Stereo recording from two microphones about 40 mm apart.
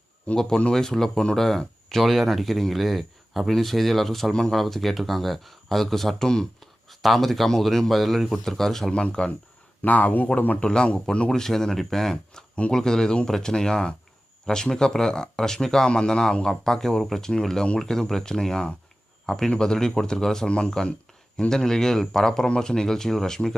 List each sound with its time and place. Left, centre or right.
0.3 s speech: left
0.7 s speech: centre
4.3 s speech: centre
4.5 s speech: centre
6.9 s speech: centre
8.9 s speech: left
9.8 s speech: left
10.6 s speech: left
11.3 s speech: centre
20.5 s speech: left
21.5 s speech: centre